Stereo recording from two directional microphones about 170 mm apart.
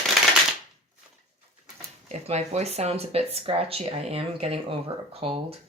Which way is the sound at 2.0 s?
40° right (ahead or behind).